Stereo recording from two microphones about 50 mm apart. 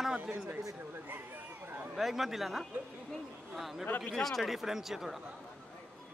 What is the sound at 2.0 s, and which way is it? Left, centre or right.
Speech, centre.